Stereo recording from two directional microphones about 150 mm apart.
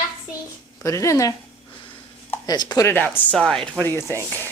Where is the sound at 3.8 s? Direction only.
15° left (ahead or behind).